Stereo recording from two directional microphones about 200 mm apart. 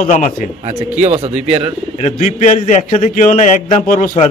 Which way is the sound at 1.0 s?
30° right (ahead or behind).